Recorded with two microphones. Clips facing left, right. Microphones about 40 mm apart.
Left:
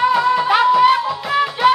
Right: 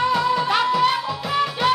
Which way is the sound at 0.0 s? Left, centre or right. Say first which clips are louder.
Left 5 dB; centre.